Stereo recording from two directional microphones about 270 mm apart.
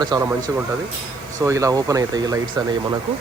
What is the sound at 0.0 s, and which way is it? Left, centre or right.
Speech, centre.